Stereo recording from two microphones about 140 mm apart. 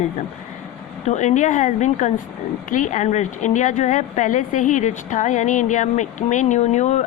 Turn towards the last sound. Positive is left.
turn(degrees=55)  # may be behind; listen again after turning